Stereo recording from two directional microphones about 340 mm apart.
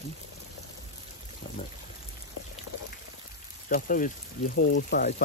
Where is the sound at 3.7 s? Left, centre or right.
Left.